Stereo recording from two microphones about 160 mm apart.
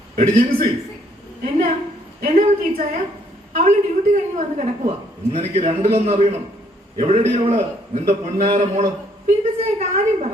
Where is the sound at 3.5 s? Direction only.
55° right (ahead or behind).